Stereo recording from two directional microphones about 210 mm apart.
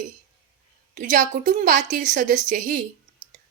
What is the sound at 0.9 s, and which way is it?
A woman's voice, 40° right (ahead or behind).